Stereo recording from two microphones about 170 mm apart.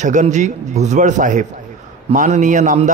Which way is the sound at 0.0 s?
45° right (ahead or behind).